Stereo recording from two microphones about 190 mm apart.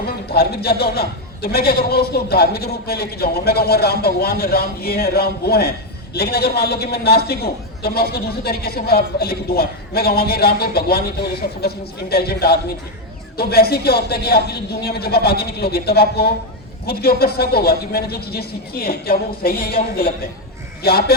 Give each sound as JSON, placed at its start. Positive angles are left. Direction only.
{"t": 0.3, "sound": "a man's voice", "side_deg": 55}